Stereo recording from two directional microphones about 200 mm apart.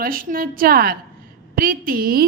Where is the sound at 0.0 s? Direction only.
45° right (ahead or behind).